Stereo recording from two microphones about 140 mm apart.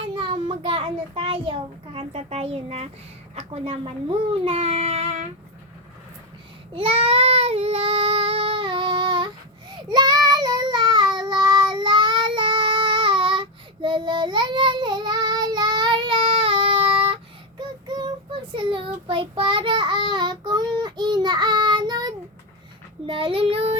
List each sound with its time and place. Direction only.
0.0 s child singing: 35° right (ahead or behind)
3.3 s a child's voice: 45° right (ahead or behind)
6.7 s child singing: 40° right (ahead or behind)